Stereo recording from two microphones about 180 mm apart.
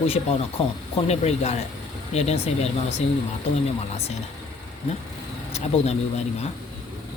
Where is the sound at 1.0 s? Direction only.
35° left (ahead or behind).